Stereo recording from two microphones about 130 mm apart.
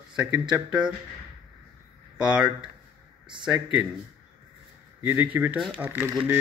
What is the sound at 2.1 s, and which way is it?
Speech, 5° right (ahead or behind).